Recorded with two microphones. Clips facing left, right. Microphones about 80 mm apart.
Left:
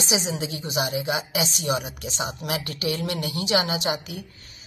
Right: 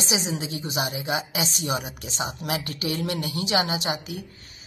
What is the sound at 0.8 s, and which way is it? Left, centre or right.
A woman's voice, right.